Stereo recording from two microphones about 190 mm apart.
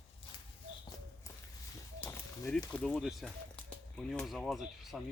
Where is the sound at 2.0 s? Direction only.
10° left (ahead or behind).